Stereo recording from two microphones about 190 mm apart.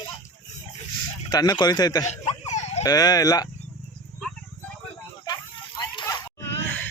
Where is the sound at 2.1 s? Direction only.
35° left (ahead or behind).